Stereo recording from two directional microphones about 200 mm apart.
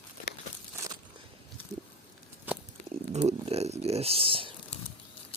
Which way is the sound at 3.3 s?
30° right (ahead or behind).